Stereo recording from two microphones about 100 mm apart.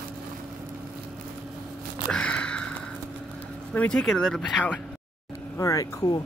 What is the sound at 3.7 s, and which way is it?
Speech, 10° left (ahead or behind).